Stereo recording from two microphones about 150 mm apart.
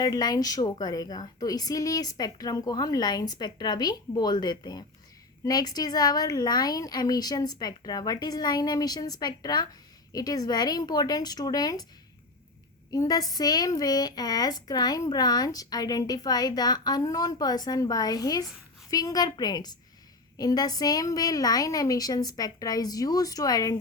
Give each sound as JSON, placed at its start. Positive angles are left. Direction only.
{"t": 0.0, "sound": "a woman's voice", "side_deg": 25}
{"t": 12.9, "sound": "a woman's voice", "side_deg": 25}